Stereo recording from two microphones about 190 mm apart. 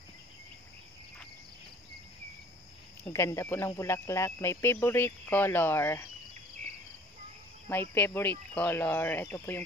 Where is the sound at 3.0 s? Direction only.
15° left (ahead or behind).